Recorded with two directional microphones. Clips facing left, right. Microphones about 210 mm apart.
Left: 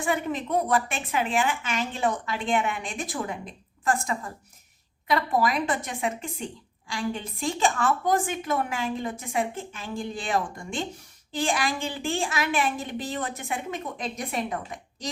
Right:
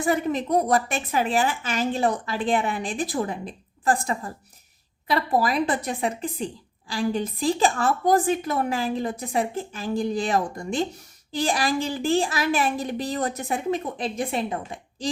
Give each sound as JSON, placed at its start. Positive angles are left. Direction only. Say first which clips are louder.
{"t": 0.0, "sound": "speech", "louder": "right 4 dB", "side_deg": -40}